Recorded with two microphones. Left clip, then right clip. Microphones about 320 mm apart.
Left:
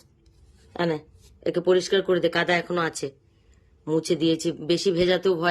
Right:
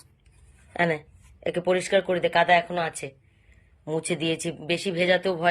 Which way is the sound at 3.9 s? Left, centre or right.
Centre.